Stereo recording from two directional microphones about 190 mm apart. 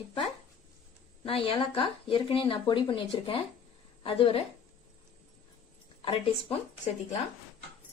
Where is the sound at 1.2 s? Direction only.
30° left (ahead or behind).